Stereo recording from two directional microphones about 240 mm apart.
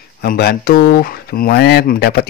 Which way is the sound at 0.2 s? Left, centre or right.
Left.